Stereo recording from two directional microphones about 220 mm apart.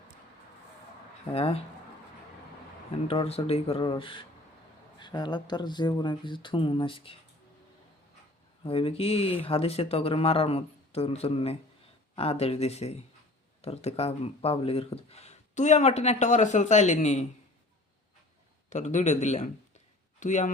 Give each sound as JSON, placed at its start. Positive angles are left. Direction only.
{"t": 1.3, "sound": "speech", "side_deg": 25}
{"t": 3.1, "sound": "speech", "side_deg": 25}
{"t": 8.6, "sound": "speech", "side_deg": 25}
{"t": 18.7, "sound": "speech", "side_deg": 30}